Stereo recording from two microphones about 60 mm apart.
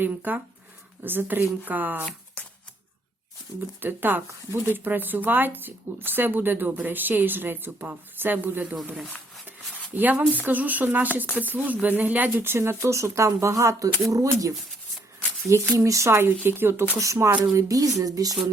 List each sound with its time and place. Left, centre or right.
0.0 s speech: right
3.8 s speech: right
9.9 s speech: right
15.4 s speech: right
16.0 s speech: right
17.0 s speech: right